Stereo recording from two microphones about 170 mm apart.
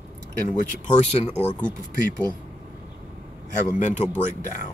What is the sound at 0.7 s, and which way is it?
Speech, 45° left (ahead or behind).